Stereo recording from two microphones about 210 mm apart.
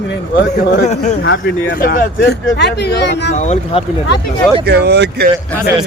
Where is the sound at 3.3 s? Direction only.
35° left (ahead or behind).